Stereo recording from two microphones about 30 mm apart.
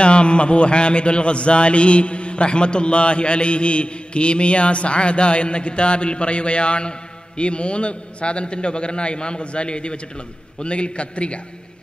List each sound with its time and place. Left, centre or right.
0.0 s a man's voice: left